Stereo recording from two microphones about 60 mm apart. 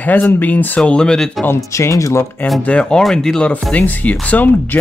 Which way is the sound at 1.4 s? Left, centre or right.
Left.